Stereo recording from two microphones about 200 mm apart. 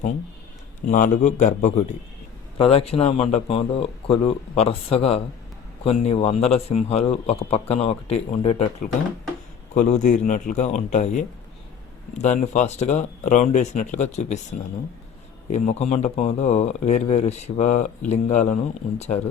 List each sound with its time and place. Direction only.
0.9 s speech: 40° left (ahead or behind)
9.7 s speech: 35° left (ahead or behind)
15.5 s speech: 35° left (ahead or behind)